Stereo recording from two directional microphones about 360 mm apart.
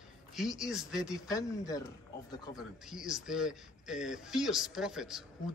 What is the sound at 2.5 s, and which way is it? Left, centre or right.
A man's voice, centre.